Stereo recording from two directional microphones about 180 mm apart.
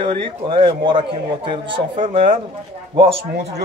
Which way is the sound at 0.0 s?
30° right (ahead or behind).